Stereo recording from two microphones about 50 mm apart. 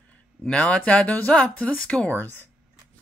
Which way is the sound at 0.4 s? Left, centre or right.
Centre.